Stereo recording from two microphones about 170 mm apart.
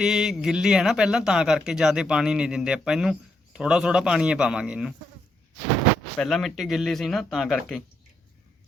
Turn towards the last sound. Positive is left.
turn(degrees=0)  # may be behind; listen again after turning